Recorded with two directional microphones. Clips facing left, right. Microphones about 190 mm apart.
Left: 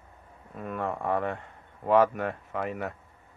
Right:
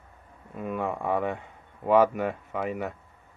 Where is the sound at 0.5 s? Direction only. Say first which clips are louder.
Right 2 dB; 5° right (ahead or behind).